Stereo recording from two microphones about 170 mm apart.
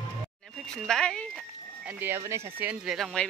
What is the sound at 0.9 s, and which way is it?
Speech, 5° left (ahead or behind).